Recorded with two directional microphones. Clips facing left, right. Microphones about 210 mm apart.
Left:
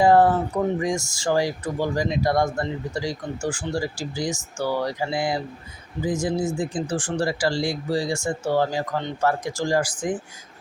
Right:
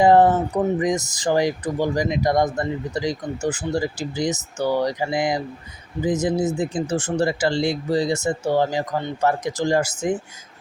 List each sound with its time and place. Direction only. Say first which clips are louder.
0.0 s speech: right 2 dB; 20° right (ahead or behind)